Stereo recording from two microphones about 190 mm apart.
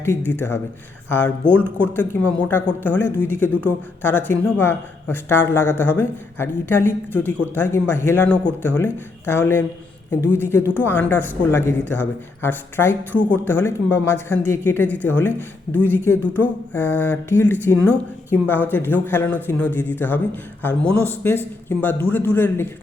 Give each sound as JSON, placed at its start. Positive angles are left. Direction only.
{"t": 0.3, "sound": "speech", "side_deg": 10}
{"t": 1.5, "sound": "speech", "side_deg": -10}
{"t": 1.8, "sound": "speech", "side_deg": 10}
{"t": 16.2, "sound": "speech", "side_deg": -10}
{"t": 16.7, "sound": "speech", "side_deg": 10}